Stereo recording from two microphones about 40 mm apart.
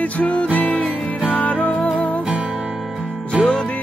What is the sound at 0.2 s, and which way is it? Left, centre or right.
Music, left.